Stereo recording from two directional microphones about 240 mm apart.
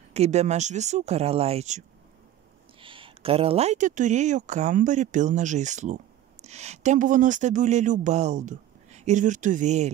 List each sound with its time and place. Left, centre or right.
0.1 s speech: right